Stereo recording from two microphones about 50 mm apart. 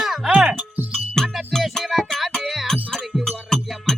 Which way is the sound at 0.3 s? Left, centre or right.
Right.